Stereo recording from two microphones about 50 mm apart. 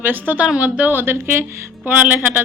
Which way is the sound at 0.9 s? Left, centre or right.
Right.